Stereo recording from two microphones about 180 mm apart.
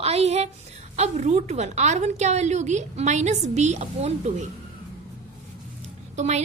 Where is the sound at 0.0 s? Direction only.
35° right (ahead or behind).